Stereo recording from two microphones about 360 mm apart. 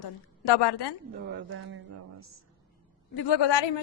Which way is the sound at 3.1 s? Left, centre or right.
Left.